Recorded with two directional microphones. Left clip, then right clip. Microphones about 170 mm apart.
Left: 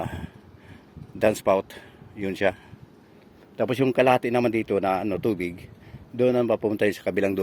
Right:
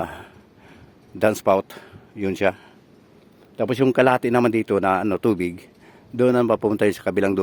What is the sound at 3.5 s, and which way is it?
A man's voice, 30° right (ahead or behind).